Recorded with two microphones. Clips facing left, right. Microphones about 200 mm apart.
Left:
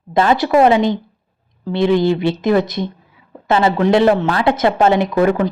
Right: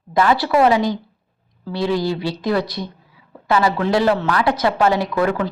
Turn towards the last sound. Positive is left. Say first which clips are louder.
# left 5 dB
turn(degrees=20)  # may be behind; listen again after turning